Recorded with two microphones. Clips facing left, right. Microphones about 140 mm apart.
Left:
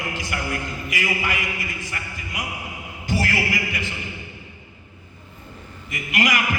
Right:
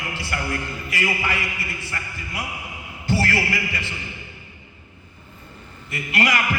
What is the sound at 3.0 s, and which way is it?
Speech, 15° left (ahead or behind).